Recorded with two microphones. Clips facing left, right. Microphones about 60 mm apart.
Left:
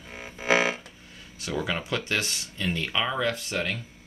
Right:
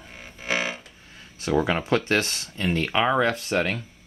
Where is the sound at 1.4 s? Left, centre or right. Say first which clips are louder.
Right 7 dB; right.